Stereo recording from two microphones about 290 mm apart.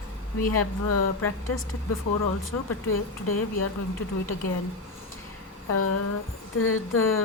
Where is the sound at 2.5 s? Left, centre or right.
Left.